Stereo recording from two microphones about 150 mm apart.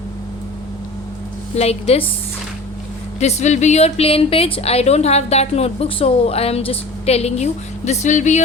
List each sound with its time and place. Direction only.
1.5 s a woman's voice: 45° left (ahead or behind)
3.2 s a woman's voice: 50° left (ahead or behind)